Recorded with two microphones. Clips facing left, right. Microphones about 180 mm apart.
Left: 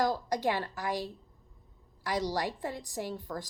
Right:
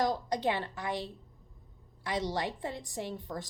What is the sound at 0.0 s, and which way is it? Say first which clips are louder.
A woman's voice: left 1 dB; 20° right (ahead or behind).